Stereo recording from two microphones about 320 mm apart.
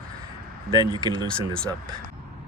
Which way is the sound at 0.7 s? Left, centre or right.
Centre.